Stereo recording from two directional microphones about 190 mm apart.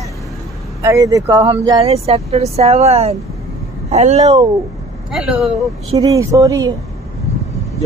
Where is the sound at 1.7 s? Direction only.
30° right (ahead or behind).